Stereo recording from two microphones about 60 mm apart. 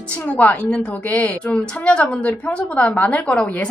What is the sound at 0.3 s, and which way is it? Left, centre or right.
A woman's voice, left.